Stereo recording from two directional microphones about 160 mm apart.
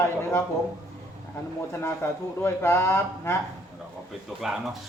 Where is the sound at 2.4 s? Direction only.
15° left (ahead or behind).